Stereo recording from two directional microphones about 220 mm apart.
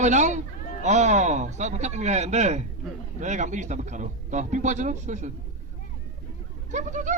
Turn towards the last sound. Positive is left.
turn(degrees=-35)  # may be behind; listen again after turning